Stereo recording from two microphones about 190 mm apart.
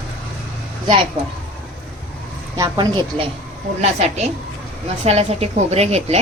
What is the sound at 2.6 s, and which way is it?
Speech, 25° right (ahead or behind).